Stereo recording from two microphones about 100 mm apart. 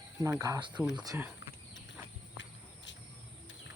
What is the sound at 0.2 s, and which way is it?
Speech, 30° right (ahead or behind).